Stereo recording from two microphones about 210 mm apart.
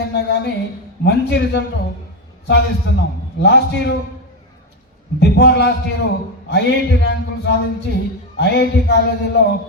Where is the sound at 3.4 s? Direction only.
55° left (ahead or behind).